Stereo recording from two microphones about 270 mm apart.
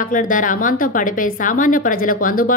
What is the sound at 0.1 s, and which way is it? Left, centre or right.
Speech, left.